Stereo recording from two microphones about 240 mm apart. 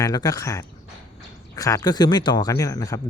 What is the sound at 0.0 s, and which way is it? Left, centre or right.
Speech, centre.